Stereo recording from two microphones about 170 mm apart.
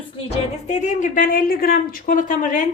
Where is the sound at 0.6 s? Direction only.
45° left (ahead or behind).